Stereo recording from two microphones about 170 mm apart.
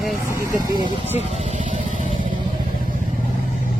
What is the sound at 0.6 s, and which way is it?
Speech, 25° right (ahead or behind).